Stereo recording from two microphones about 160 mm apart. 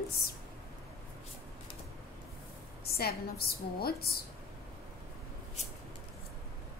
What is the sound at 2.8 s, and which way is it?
A woman's voice, 75° left (ahead or behind).